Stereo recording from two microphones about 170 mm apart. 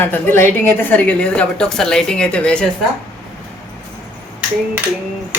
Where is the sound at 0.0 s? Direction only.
10° left (ahead or behind).